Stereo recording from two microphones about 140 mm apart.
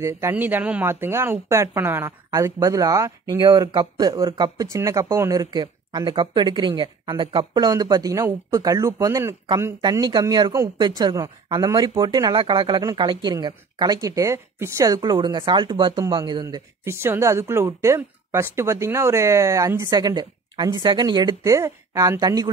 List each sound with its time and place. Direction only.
0.0 s speech: 15° right (ahead or behind)
9.8 s speech: 30° right (ahead or behind)
16.8 s speech: 20° right (ahead or behind)
21.4 s speech: 20° right (ahead or behind)